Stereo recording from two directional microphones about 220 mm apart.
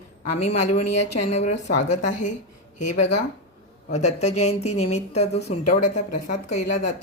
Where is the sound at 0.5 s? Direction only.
30° left (ahead or behind).